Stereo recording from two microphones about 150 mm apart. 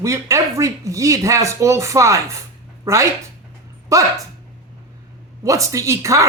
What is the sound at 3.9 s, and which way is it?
Speech, 20° right (ahead or behind).